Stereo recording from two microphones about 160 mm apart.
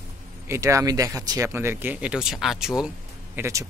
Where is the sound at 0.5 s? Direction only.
20° right (ahead or behind); by 2.9 s 5° right (ahead or behind).